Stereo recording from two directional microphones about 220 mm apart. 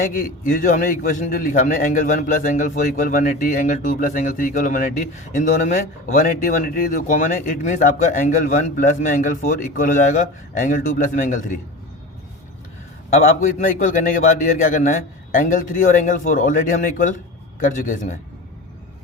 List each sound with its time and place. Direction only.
0.1 s a man's voice: 40° left (ahead or behind)
13.7 s a man's voice: 35° left (ahead or behind)